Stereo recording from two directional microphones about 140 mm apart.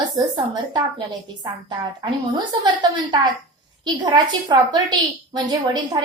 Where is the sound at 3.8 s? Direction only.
30° right (ahead or behind).